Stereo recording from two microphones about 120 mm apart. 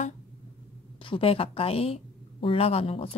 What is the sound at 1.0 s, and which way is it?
A woman's voice, 50° left (ahead or behind).